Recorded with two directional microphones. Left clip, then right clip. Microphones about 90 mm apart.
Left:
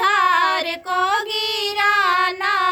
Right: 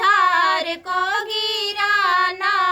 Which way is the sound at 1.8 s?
40° left (ahead or behind).